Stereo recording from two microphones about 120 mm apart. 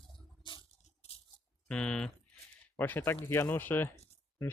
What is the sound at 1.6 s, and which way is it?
Speech, 10° left (ahead or behind).